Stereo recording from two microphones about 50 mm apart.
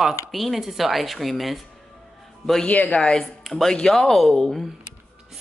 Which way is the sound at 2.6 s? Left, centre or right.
Left.